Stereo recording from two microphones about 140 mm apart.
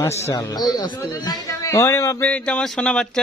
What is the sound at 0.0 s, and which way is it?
A man's voice, 20° left (ahead or behind).